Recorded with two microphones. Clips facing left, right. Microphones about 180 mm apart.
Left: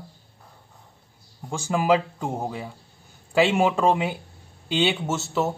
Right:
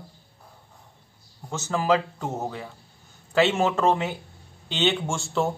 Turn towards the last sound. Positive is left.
turn(degrees=5)  # may be behind; listen again after turning